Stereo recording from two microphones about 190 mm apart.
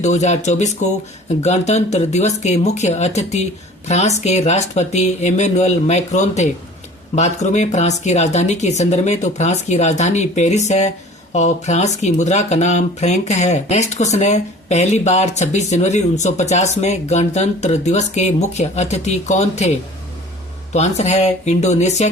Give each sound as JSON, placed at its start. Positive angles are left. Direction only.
{"t": 0.0, "sound": "speech", "side_deg": 40}
{"t": 20.7, "sound": "speech", "side_deg": 35}